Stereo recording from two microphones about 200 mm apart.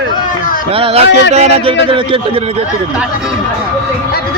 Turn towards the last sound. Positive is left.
turn(degrees=-25)  # may be behind; listen again after turning